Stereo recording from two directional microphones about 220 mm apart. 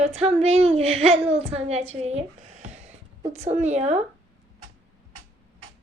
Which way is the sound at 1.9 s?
30° right (ahead or behind).